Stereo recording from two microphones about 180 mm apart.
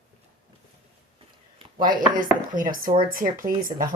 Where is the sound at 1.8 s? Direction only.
50° right (ahead or behind).